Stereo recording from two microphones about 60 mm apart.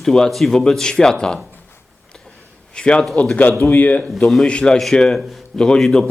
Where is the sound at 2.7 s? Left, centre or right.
Centre.